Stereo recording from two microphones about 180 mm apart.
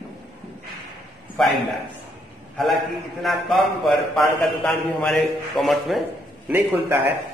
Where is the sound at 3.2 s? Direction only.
Centre (ahead or behind).